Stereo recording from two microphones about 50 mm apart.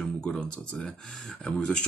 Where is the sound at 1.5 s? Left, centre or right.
Left.